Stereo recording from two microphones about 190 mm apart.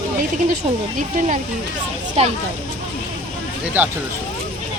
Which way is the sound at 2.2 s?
35° right (ahead or behind).